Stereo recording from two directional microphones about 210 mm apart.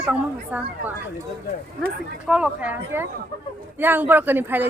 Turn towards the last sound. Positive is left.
turn(degrees=-10)  # may be behind; listen again after turning